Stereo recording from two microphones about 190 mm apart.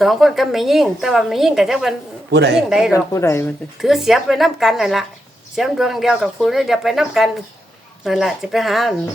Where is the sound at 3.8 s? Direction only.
Centre (ahead or behind).